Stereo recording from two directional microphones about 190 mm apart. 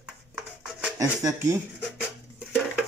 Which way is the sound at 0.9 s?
15° right (ahead or behind).